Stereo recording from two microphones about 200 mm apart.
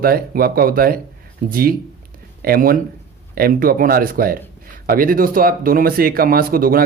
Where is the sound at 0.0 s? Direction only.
50° right (ahead or behind).